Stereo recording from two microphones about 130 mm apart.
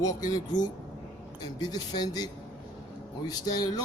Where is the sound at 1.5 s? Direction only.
30° left (ahead or behind).